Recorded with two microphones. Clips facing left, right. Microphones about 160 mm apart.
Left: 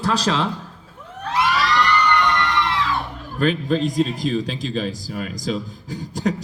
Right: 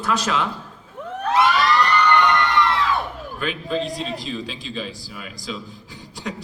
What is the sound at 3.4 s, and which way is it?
A man's voice, 40° left (ahead or behind).